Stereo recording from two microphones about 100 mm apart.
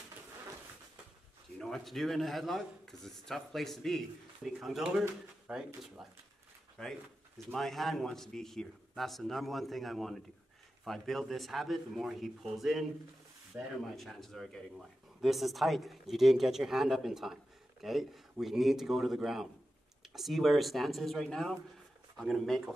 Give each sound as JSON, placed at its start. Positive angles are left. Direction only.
{"t": 1.6, "sound": "speech", "side_deg": 0}
{"t": 6.8, "sound": "speech", "side_deg": 5}
{"t": 13.5, "sound": "speech", "side_deg": -20}
{"t": 13.9, "sound": "speech", "side_deg": 0}